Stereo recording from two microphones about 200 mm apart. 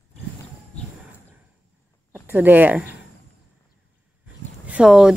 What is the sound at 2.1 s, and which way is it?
Speech, 10° right (ahead or behind).